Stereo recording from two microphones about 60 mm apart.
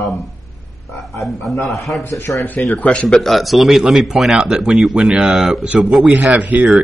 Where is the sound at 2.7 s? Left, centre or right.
Left.